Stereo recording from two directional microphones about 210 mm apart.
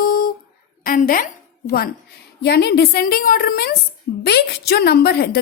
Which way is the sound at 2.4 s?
50° left (ahead or behind).